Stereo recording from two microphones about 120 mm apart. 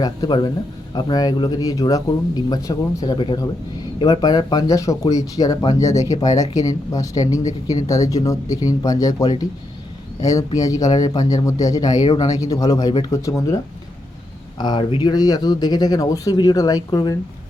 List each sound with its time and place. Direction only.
0.0 s speech: 35° left (ahead or behind)
14.6 s speech: 40° left (ahead or behind)